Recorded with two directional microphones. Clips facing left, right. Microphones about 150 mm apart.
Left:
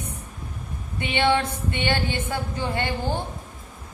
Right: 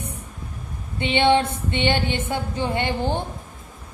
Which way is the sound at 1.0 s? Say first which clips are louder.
Right 4 dB; 25° right (ahead or behind).